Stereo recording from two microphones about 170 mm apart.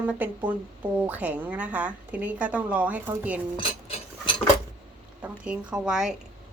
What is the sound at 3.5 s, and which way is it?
Cutlery, 30° left (ahead or behind).